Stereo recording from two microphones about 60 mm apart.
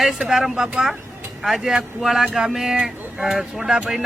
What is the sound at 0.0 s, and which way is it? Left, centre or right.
Speech, centre.